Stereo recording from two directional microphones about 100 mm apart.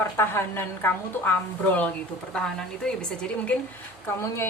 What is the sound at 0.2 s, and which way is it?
A woman's voice, 25° left (ahead or behind).